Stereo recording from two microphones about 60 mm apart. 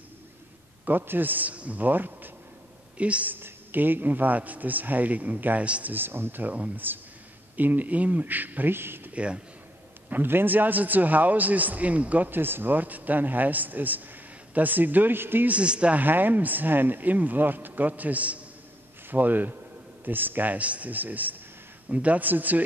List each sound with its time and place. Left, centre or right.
0.8 s speech: right
3.0 s a man's voice: right
3.3 s a man's voice: right
9.1 s a man's voice: centre
10.0 s a man's voice: right
15.5 s a man's voice: centre
16.0 s a man's voice: right